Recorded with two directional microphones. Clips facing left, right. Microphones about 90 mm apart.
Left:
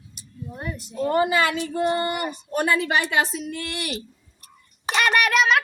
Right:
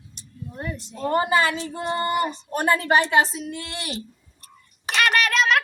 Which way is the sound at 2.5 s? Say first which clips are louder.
Right 1 dB; 40° right (ahead or behind).